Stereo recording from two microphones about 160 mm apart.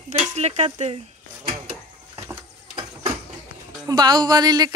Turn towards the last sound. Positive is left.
turn(degrees=-25)  # may be behind; listen again after turning